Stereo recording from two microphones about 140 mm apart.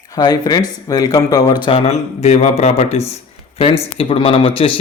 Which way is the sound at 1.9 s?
50° left (ahead or behind).